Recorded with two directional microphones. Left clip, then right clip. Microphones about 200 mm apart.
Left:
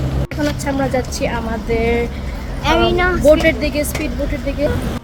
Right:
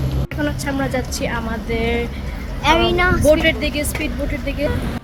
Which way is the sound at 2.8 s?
20° right (ahead or behind).